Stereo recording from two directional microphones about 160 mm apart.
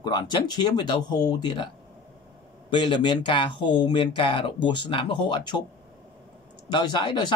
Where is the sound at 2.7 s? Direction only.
30° left (ahead or behind).